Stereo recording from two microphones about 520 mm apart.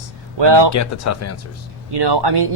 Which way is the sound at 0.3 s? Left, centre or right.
Right.